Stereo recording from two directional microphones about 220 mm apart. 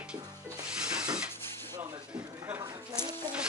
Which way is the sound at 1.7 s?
15° right (ahead or behind).